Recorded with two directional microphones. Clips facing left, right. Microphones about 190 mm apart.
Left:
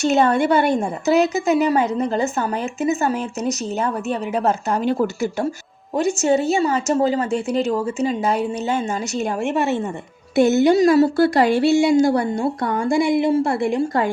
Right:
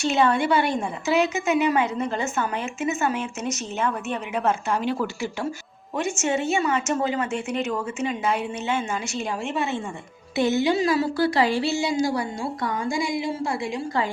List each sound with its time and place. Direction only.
0.0 s a woman's voice: 45° left (ahead or behind)
10.3 s speech: 45° left (ahead or behind)